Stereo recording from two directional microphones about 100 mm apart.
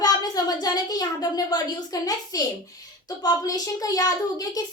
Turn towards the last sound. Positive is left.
turn(degrees=40)  # may be behind; listen again after turning